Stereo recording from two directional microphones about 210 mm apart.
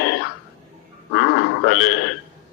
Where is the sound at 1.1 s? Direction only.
50° left (ahead or behind).